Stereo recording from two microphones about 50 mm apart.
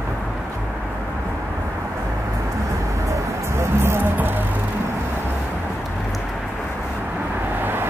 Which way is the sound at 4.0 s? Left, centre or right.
Right.